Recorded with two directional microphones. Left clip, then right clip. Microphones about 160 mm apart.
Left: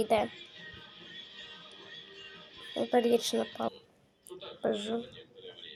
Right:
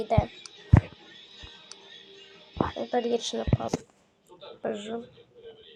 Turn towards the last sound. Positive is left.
turn(degrees=5)  # may be behind; listen again after turning